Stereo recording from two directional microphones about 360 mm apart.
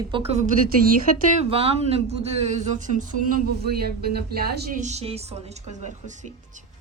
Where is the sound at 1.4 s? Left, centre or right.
Centre.